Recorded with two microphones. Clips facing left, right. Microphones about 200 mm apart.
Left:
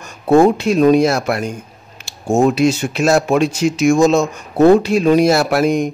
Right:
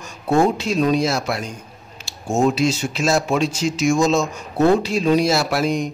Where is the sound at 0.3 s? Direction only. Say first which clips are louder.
Left 6 dB; 60° left (ahead or behind).